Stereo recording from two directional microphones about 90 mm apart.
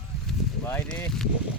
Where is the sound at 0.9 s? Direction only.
5° left (ahead or behind).